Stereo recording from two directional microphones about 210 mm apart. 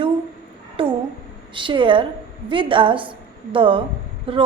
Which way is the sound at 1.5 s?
25° right (ahead or behind).